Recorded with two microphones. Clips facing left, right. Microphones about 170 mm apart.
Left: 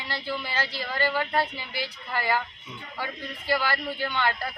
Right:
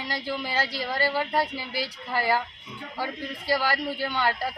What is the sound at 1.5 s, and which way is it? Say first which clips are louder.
Speech: right 3 dB; 40° right (ahead or behind).